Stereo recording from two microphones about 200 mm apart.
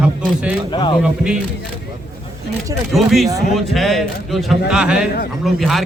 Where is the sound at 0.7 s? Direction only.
25° left (ahead or behind).